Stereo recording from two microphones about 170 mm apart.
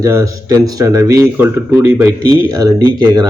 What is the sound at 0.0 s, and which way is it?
Speech, 20° right (ahead or behind).